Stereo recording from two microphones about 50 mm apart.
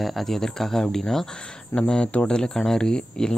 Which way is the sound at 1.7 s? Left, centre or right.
Centre.